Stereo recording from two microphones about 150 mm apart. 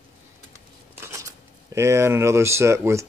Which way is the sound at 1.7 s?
20° right (ahead or behind).